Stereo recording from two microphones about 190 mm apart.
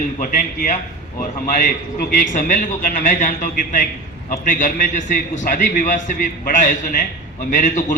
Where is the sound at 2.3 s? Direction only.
45° left (ahead or behind).